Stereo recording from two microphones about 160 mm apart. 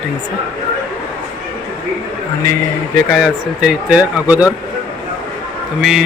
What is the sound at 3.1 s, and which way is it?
Speech, 5° right (ahead or behind).